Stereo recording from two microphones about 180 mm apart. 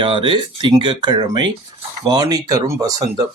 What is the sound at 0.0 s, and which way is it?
Speech, 30° right (ahead or behind).